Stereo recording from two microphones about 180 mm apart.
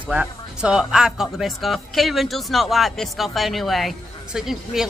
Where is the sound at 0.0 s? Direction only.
5° right (ahead or behind).